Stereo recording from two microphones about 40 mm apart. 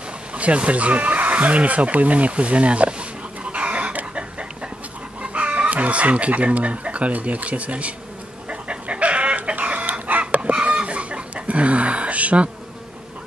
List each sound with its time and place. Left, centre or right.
0.3 s speech: right
3.5 s chicken: right
5.2 s speech: right
8.5 s chicken: right